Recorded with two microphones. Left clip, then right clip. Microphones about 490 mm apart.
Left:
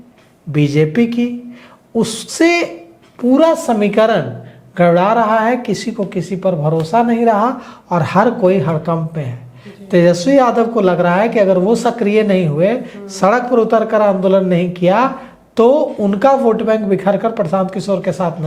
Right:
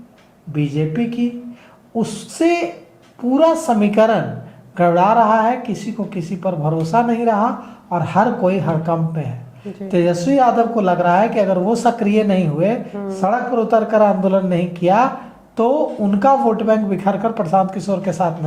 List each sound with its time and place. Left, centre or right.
0.5 s speech: left